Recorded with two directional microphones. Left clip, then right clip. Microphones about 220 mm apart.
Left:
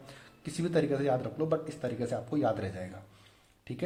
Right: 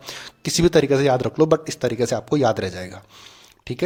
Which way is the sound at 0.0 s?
40° right (ahead or behind).